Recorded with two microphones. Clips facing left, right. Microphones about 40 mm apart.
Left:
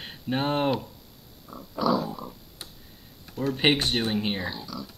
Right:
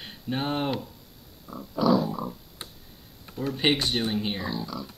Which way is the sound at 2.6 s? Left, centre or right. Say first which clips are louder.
Right 2 dB; right.